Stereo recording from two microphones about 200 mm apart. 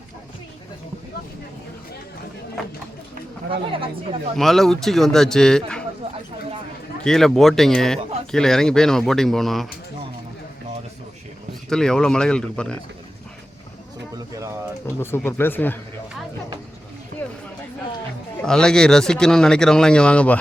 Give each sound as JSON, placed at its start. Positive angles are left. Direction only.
{"t": 3.5, "sound": "speech", "side_deg": -25}
{"t": 4.4, "sound": "speech", "side_deg": 0}
{"t": 7.0, "sound": "speech", "side_deg": 0}
{"t": 11.7, "sound": "speech", "side_deg": 5}
{"t": 15.0, "sound": "speech", "side_deg": 10}
{"t": 17.2, "sound": "a sound", "side_deg": 10}
{"t": 18.4, "sound": "speech", "side_deg": 5}